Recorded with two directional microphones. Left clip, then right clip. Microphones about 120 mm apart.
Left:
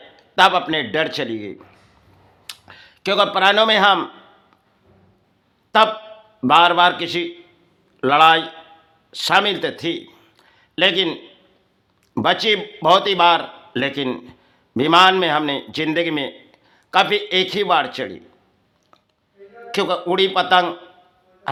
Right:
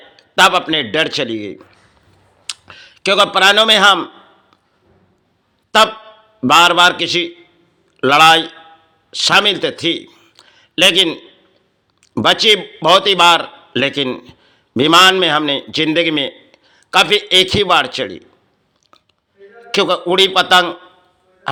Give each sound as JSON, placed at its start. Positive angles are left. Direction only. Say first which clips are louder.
{"t": 0.2, "sound": "a man's voice", "louder": "right 3 dB", "side_deg": -20}
{"t": 5.7, "sound": "a sound", "louder": "right 3 dB", "side_deg": -25}
{"t": 6.4, "sound": "a man's voice", "louder": "right 4 dB", "side_deg": -25}
{"t": 10.1, "sound": "a sound", "louder": "right 2 dB", "side_deg": -15}
{"t": 10.3, "sound": "a sound", "louder": "right 7 dB", "side_deg": -25}
{"t": 12.2, "sound": "a man's voice", "louder": "right 6 dB", "side_deg": -25}
{"t": 14.1, "sound": "speech", "louder": "right 3 dB", "side_deg": -10}
{"t": 14.8, "sound": "a man's voice", "louder": "right 4 dB", "side_deg": -25}
{"t": 19.7, "sound": "a man's voice", "louder": "right 6 dB", "side_deg": -25}